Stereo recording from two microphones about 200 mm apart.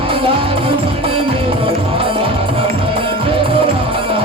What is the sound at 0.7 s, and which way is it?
Music, 25° right (ahead or behind).